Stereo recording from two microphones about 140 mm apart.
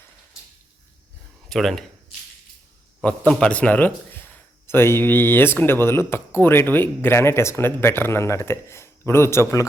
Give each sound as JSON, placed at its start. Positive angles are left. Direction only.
{"t": 1.5, "sound": "speech", "side_deg": 0}
{"t": 3.0, "sound": "a man's voice", "side_deg": 10}